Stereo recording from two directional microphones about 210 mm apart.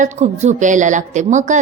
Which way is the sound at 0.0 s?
35° right (ahead or behind).